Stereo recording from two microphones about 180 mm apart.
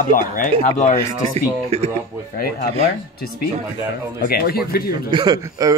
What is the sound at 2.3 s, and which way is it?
Speech, 55° left (ahead or behind).